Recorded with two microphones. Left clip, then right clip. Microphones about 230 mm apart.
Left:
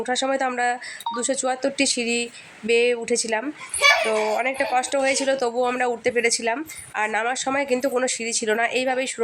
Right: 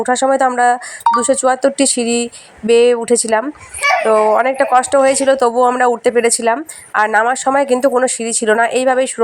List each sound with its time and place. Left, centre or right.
0.0 s speech: right